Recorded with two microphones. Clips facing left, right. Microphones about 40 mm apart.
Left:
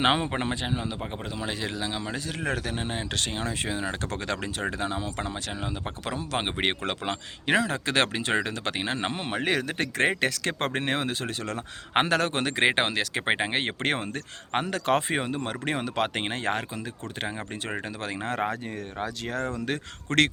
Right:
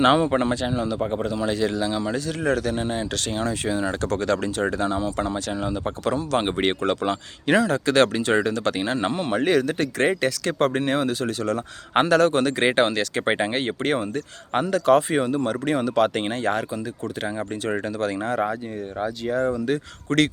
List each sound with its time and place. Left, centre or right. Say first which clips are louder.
0.0 s a man's voice: right 6 dB; left
13.6 s a man's voice: right 4 dB; left
18.3 s speech: right 2 dB; left
19.0 s speech: right 8 dB; left
19.5 s speech: right 6 dB; left